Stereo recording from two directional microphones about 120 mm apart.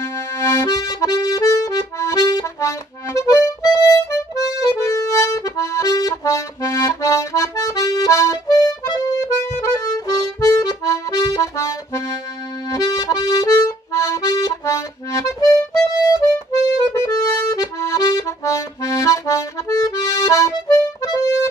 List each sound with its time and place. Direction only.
0.0 s accordion: 20° left (ahead or behind)